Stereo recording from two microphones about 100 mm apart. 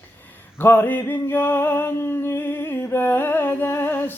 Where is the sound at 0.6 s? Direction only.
20° left (ahead or behind).